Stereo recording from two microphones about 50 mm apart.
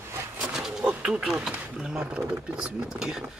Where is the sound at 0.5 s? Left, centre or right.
Centre.